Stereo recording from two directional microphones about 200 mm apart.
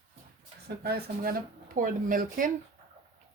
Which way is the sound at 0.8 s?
50° right (ahead or behind).